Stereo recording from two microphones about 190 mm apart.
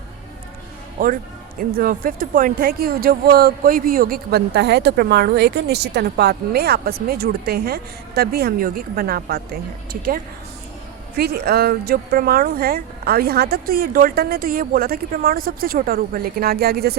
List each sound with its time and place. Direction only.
0.9 s a man's voice: 50° right (ahead or behind)
11.2 s speech: 55° right (ahead or behind)